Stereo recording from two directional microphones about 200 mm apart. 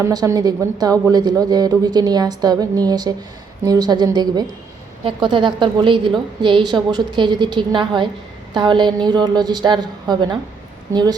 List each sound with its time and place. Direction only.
0.0 s a woman's voice: 15° right (ahead or behind)